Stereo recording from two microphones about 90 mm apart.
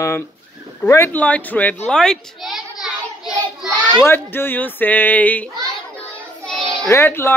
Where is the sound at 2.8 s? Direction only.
5° right (ahead or behind).